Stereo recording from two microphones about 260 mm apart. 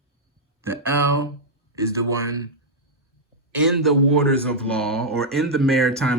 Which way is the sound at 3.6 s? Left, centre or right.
Centre.